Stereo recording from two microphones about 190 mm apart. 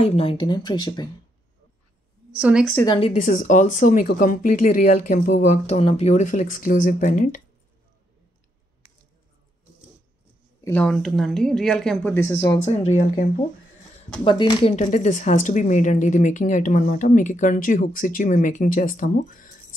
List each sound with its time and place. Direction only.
0.0 s speech: 30° left (ahead or behind)
2.3 s a woman's voice: 5° right (ahead or behind)
2.8 s speech: 25° left (ahead or behind)
3.1 s speech: 40° left (ahead or behind)
10.6 s a woman's voice: 10° left (ahead or behind)
12.6 s speech: 35° left (ahead or behind)
14.2 s speech: 25° left (ahead or behind); by 19.5 s 45° left (ahead or behind)